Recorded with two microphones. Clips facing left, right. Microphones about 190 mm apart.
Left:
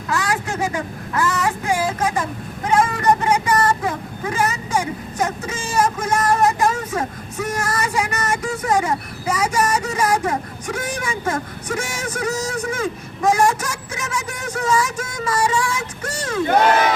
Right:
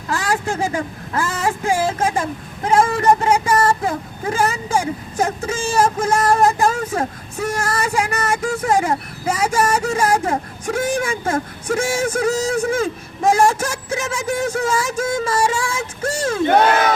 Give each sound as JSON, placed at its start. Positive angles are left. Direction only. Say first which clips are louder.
{"t": 0.1, "sound": "speech", "louder": "right 2 dB", "side_deg": -30}
{"t": 2.9, "sound": "vehicle", "louder": "right 2 dB", "side_deg": -30}
{"t": 10.8, "sound": "speech", "louder": "right 7 dB", "side_deg": -30}